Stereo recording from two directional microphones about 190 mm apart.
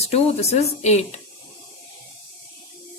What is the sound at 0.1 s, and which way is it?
Speech, 35° left (ahead or behind).